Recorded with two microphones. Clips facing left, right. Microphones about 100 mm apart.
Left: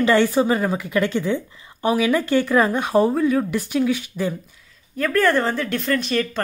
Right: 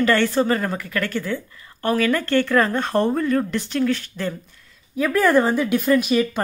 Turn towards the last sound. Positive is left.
turn(degrees=-10)  # may be behind; listen again after turning